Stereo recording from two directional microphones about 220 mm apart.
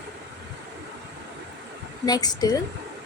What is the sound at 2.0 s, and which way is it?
Speech, 15° left (ahead or behind).